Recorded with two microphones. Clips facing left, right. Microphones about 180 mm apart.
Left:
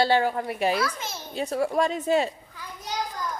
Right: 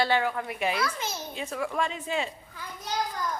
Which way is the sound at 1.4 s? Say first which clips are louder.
Left 7 dB; 35° left (ahead or behind).